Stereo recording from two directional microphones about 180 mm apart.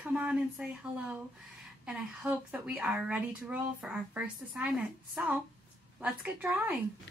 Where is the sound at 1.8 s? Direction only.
10° right (ahead or behind).